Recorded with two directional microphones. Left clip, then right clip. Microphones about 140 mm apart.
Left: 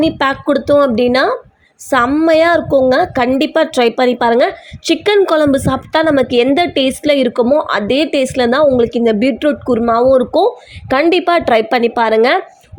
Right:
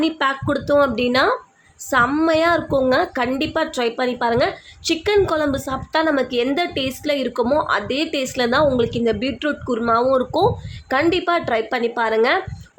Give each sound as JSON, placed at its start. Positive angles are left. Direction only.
{"t": 0.0, "sound": "a woman's voice", "side_deg": 40}
{"t": 7.4, "sound": "speech", "side_deg": 25}
{"t": 7.7, "sound": "a woman's voice", "side_deg": 40}
{"t": 11.1, "sound": "a woman's voice", "side_deg": 45}